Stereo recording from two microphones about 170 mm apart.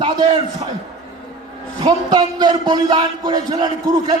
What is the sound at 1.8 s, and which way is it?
A man's voice, 25° right (ahead or behind).